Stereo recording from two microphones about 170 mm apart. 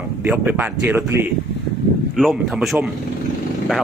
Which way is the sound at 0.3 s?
10° right (ahead or behind).